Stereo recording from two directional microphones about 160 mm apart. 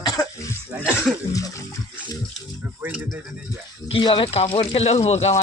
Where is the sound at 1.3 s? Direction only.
20° left (ahead or behind).